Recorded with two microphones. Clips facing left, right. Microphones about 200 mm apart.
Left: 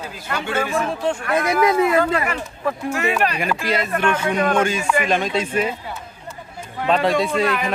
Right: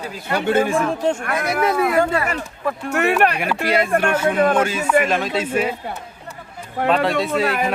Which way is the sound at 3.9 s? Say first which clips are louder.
Right 2 dB; 45° right (ahead or behind).